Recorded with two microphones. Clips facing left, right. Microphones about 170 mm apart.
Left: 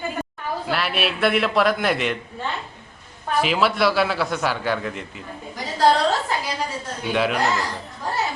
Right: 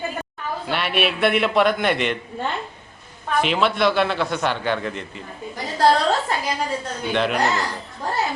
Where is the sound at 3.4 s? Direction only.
5° left (ahead or behind).